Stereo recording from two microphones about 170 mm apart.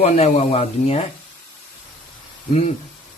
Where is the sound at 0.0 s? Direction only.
40° left (ahead or behind).